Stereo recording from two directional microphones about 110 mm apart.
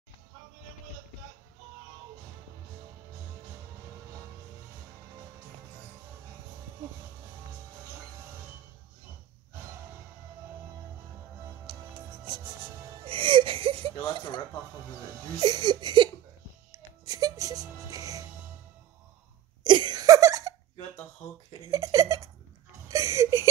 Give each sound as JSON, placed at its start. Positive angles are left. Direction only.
{"t": 11.6, "sound": "music", "side_deg": -45}
{"t": 15.3, "sound": "a sound", "side_deg": -40}
{"t": 17.0, "sound": "music", "side_deg": -35}
{"t": 19.6, "sound": "a sound", "side_deg": -45}
{"t": 21.6, "sound": "giggle", "side_deg": -30}
{"t": 22.8, "sound": "whimper", "side_deg": -30}